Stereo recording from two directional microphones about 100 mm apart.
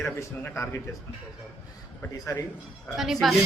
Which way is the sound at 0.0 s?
25° left (ahead or behind).